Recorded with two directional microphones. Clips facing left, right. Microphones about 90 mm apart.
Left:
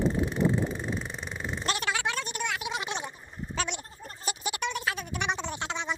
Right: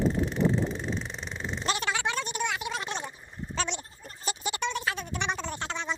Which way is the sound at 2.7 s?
15° left (ahead or behind).